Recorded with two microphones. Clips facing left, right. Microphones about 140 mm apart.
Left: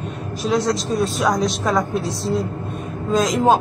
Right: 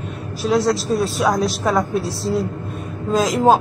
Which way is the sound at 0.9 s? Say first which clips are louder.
Right 1 dB; centre (ahead or behind).